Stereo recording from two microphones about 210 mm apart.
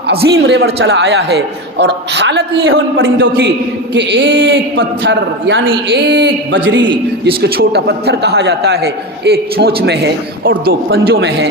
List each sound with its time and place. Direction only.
0.1 s a man's voice: 50° right (ahead or behind)
7.3 s a man's voice: 45° right (ahead or behind)